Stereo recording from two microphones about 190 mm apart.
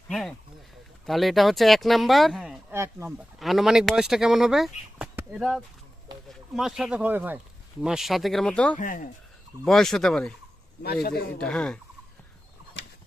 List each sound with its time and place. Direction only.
0.1 s speech: centre (ahead or behind)
2.7 s speech: 15° right (ahead or behind)
3.3 s speech: centre (ahead or behind)
8.8 s speech: 45° left (ahead or behind)
9.6 s speech: centre (ahead or behind)
11.0 s speech: 55° left (ahead or behind)
11.3 s speech: 5° left (ahead or behind)